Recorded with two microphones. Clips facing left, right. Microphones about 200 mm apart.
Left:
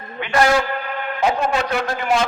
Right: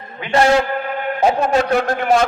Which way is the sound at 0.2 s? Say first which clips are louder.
Right 3 dB; 30° right (ahead or behind).